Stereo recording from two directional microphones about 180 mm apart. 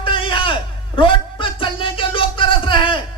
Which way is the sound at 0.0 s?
30° left (ahead or behind).